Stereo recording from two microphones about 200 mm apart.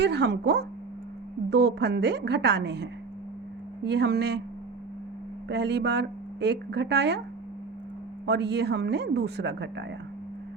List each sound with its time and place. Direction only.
0.0 s speech: 60° right (ahead or behind)
5.5 s speech: 60° right (ahead or behind)
8.3 s speech: 60° right (ahead or behind)